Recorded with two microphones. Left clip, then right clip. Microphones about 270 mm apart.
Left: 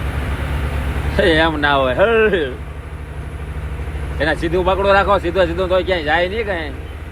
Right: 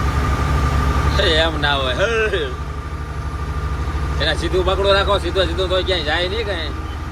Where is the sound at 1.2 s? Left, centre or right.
Centre.